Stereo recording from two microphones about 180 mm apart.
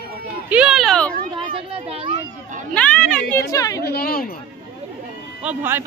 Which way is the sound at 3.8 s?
60° left (ahead or behind).